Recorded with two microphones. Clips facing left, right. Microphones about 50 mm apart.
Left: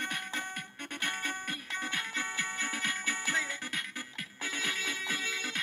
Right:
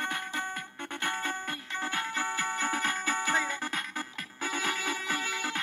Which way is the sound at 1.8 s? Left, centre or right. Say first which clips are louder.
Right 4 dB; right.